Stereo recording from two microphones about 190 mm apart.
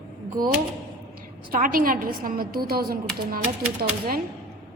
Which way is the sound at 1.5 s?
50° right (ahead or behind).